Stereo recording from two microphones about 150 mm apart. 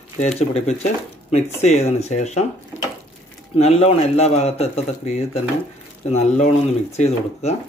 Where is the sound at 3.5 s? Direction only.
45° left (ahead or behind).